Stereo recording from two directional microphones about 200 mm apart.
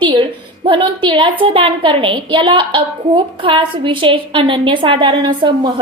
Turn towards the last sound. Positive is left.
turn(degrees=-25)  # may be behind; listen again after turning